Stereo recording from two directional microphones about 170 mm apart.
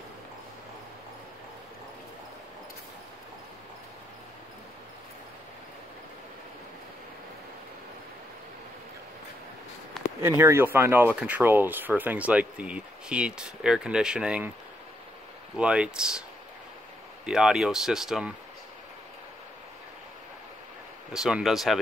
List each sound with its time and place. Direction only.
10.2 s speech: 15° right (ahead or behind)
15.5 s speech: 5° right (ahead or behind)
17.3 s speech: 5° right (ahead or behind)
21.1 s speech: 5° right (ahead or behind)